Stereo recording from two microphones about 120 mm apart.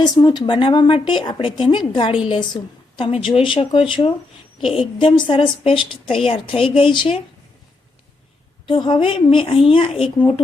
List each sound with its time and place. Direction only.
0.0 s a woman's voice: 35° left (ahead or behind)
8.6 s a woman's voice: 40° left (ahead or behind)